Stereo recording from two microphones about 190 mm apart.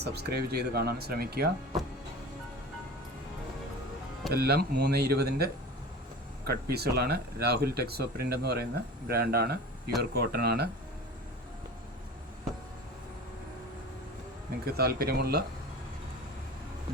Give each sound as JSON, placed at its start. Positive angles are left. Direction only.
{"t": 0.0, "sound": "speech", "side_deg": -60}
{"t": 4.3, "sound": "speech", "side_deg": -55}
{"t": 14.7, "sound": "speech", "side_deg": -55}